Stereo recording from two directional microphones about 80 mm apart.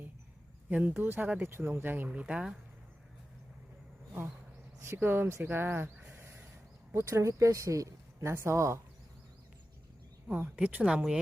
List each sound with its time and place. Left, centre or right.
0.7 s speech: right
2.0 s speech: centre
4.8 s speech: right
6.0 s a sound: right
6.9 s speech: right
10.5 s speech: centre